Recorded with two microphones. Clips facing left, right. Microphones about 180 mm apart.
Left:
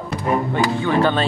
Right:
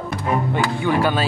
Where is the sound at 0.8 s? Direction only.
10° right (ahead or behind).